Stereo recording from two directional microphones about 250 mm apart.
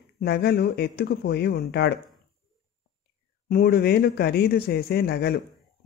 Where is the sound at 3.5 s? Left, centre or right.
Left.